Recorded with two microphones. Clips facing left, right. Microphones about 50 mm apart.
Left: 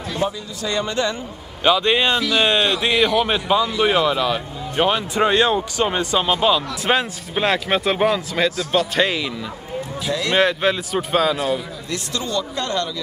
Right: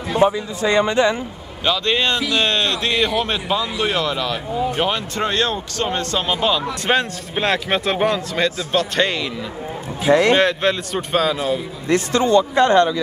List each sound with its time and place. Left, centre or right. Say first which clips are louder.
0.1 s speech: right 8 dB; right
1.6 s speech: left 2 dB; centre
2.1 s speech: left 1 dB; centre
2.4 s speech: left 2 dB; centre
10.3 s speech: right 1 dB; centre
11.9 s speech: right 10 dB; right